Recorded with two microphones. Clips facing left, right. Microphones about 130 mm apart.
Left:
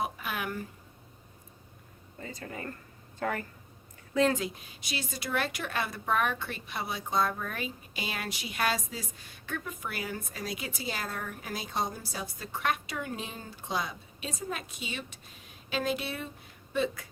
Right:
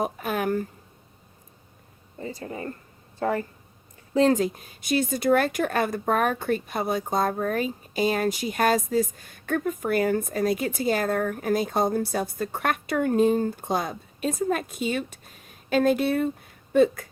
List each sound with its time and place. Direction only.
0.0 s speech: 45° right (ahead or behind)
2.1 s speech: 25° right (ahead or behind); by 17.1 s 50° right (ahead or behind)